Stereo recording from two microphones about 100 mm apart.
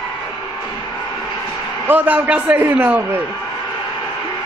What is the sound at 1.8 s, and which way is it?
A man's voice, 15° right (ahead or behind).